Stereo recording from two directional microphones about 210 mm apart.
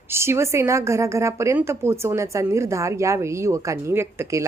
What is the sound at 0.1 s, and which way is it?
A woman's voice, 10° right (ahead or behind).